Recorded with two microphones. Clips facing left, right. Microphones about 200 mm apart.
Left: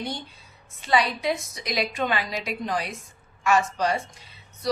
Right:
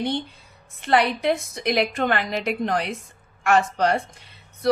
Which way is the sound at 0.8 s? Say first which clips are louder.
Right 3 dB; 60° right (ahead or behind).